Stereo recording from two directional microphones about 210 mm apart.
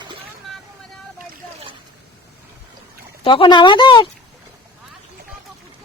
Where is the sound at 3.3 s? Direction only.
20° left (ahead or behind).